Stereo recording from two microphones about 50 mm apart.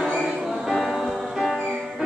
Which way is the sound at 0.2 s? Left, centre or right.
Centre.